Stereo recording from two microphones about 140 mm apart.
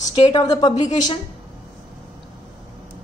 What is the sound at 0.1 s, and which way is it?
Speech, 30° left (ahead or behind).